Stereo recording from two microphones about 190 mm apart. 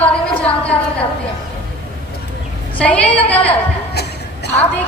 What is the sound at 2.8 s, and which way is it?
Speech, 5° left (ahead or behind).